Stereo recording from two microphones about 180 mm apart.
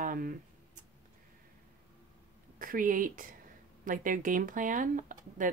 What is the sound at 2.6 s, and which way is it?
Speech, 50° right (ahead or behind).